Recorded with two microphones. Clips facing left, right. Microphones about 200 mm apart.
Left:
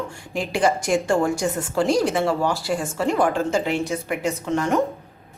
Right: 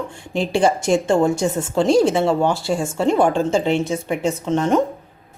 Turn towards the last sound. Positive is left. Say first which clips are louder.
# right 4 dB
turn(degrees=-20)  # may be behind; listen again after turning